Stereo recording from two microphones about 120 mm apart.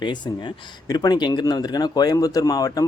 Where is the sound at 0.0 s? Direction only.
40° left (ahead or behind).